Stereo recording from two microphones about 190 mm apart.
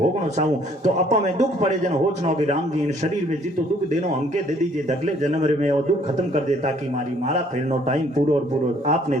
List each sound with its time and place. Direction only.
0.9 s a man's voice: 40° right (ahead or behind)
4.9 s a man's voice: 40° right (ahead or behind)
7.3 s a man's voice: 40° right (ahead or behind)